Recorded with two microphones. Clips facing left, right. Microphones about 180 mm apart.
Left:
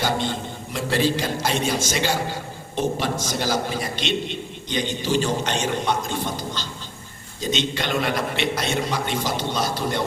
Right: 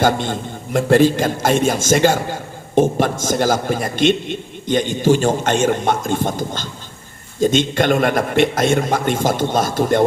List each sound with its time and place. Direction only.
0.0 s a man's voice: 50° right (ahead or behind)